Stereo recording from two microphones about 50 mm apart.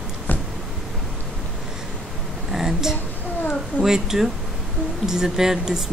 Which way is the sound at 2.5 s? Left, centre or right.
Centre.